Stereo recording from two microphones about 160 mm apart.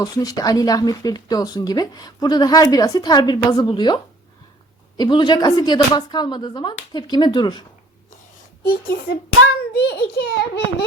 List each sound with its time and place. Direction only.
0.0 s speech: 25° left (ahead or behind)
8.6 s speech: 70° left (ahead or behind)
9.7 s a child's voice: 85° left